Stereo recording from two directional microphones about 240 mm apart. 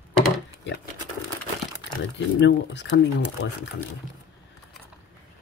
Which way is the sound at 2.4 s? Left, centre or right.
Left.